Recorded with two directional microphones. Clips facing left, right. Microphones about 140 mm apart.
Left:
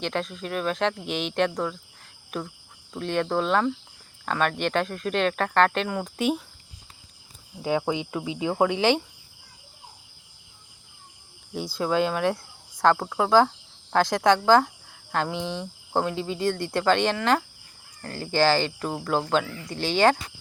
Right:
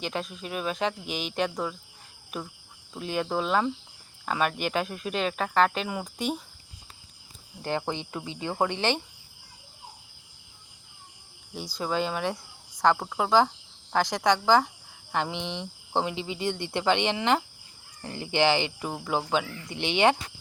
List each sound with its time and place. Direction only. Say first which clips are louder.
0.0 s speech: left 4 dB; 5° right (ahead or behind)
7.6 s speech: left 5 dB; 5° left (ahead or behind)
11.8 s speech: left 5 dB; centre (ahead or behind)
13.9 s speech: left 4 dB; 15° right (ahead or behind)